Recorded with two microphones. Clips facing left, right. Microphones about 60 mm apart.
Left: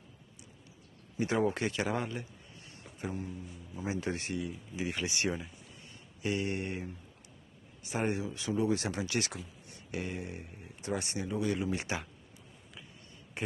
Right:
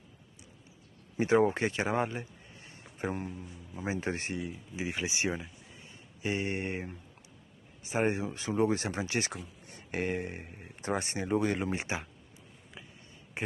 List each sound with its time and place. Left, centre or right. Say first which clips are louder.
1.1 s a man's voice: right 5 dB; right
6.2 s speech: right 1 dB; right